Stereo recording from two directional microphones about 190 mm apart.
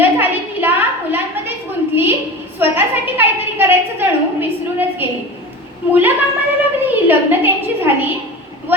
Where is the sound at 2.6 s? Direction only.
10° right (ahead or behind).